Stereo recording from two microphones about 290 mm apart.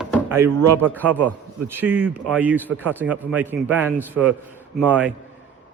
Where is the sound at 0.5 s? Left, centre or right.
Right.